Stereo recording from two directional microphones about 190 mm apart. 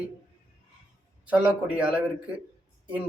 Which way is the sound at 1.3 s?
5° right (ahead or behind).